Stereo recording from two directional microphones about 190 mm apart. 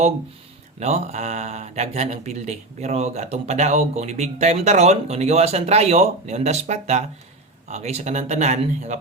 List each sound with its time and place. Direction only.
0.8 s speech: 35° right (ahead or behind)